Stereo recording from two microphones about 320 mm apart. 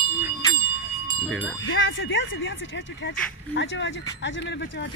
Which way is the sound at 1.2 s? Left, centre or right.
Centre.